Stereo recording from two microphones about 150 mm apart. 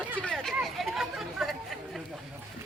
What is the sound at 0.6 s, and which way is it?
Chatter, centre (ahead or behind).